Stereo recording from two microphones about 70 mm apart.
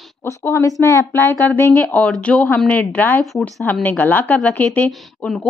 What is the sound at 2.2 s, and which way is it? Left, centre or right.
A woman's voice, centre.